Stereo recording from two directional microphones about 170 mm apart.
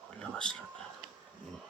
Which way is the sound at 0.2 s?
5° left (ahead or behind).